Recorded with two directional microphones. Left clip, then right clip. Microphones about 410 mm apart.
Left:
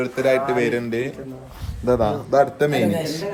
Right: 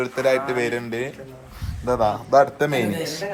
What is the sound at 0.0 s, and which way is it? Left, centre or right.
A man's voice, centre.